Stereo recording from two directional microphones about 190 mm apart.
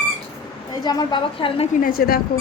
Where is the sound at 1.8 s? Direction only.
50° left (ahead or behind).